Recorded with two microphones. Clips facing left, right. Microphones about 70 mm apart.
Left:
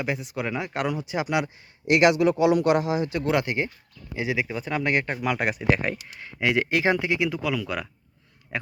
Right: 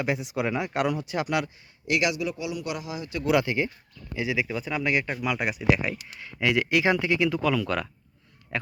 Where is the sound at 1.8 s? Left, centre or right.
Left.